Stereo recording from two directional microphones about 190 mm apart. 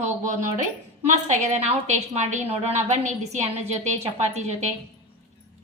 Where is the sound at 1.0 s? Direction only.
40° right (ahead or behind).